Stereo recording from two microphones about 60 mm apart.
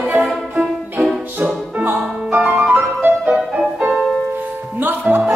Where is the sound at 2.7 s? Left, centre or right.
Right.